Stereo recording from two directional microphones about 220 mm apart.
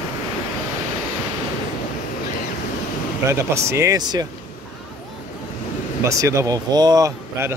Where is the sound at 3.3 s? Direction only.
10° right (ahead or behind).